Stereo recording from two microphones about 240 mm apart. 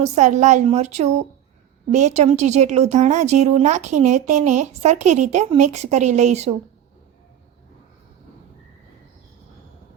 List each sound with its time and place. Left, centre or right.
0.0 s a woman's voice: right